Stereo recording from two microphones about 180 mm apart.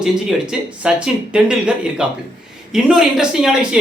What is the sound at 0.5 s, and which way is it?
Speech, 5° right (ahead or behind).